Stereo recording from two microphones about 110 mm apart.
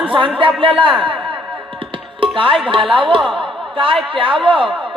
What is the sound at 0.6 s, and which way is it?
Speech, 55° right (ahead or behind).